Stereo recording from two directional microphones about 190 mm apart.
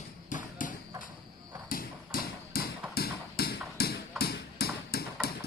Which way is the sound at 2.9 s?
55° left (ahead or behind).